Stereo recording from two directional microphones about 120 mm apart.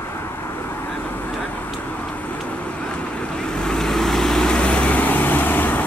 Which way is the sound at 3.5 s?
5° left (ahead or behind).